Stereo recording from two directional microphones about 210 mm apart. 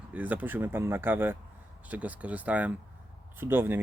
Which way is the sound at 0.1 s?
5° right (ahead or behind).